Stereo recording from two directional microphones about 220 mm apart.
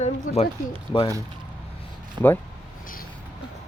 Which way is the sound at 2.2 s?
20° right (ahead or behind).